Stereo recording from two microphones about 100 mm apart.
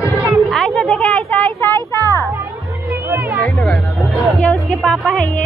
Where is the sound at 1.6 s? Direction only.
25° left (ahead or behind).